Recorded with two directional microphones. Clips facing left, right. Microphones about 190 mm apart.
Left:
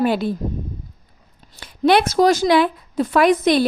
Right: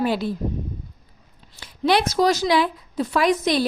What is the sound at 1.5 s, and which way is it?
Speech, 55° left (ahead or behind).